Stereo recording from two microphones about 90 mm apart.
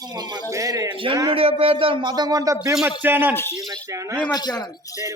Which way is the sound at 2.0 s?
50° right (ahead or behind).